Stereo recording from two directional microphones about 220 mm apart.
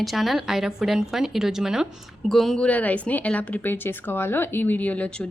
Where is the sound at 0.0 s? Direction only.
Centre (ahead or behind).